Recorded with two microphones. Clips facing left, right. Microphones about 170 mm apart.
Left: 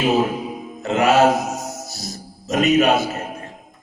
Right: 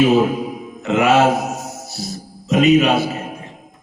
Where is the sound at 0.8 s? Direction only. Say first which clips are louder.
Right 1 dB; 40° left (ahead or behind).